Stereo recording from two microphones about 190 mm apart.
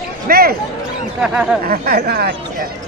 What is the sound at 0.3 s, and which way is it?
Speech, 55° right (ahead or behind).